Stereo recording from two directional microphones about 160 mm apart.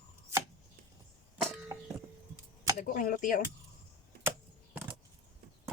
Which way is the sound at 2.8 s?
55° left (ahead or behind).